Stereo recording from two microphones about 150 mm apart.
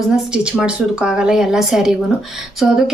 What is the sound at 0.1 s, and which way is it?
A woman's voice, 5° right (ahead or behind).